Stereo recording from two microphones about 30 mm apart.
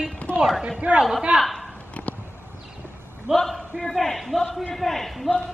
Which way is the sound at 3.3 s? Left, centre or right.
Centre.